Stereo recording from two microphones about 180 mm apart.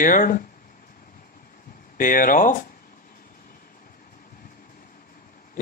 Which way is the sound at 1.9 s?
50° left (ahead or behind).